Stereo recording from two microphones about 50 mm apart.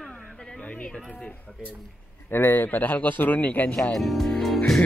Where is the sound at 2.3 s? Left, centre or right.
Left.